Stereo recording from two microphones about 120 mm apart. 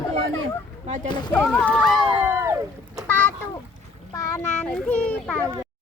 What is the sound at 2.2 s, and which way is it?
Boat, 20° right (ahead or behind).